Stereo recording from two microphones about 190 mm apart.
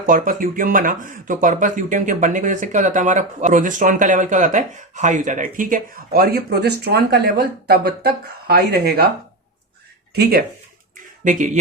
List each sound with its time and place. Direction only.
0.0 s speech: 45° right (ahead or behind)
11.2 s speech: 40° right (ahead or behind)